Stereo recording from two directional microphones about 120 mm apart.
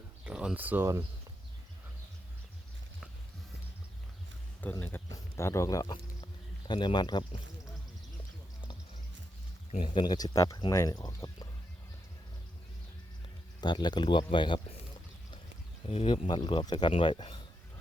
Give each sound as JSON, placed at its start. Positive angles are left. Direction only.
{"t": 0.3, "sound": "speech", "side_deg": -10}
{"t": 4.8, "sound": "speech", "side_deg": 15}
{"t": 6.7, "sound": "speech", "side_deg": 40}
{"t": 9.8, "sound": "speech", "side_deg": 40}
{"t": 13.6, "sound": "speech", "side_deg": 35}
{"t": 15.9, "sound": "speech", "side_deg": 55}